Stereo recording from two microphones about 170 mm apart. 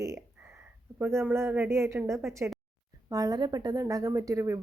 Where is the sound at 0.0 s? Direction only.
20° right (ahead or behind).